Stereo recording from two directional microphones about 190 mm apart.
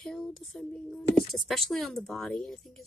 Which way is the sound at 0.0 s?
Centre (ahead or behind).